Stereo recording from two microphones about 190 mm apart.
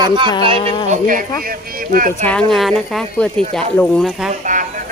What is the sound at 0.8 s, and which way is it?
Speech, 40° right (ahead or behind).